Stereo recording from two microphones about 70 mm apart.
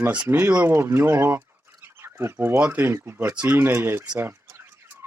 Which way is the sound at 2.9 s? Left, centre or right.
Right.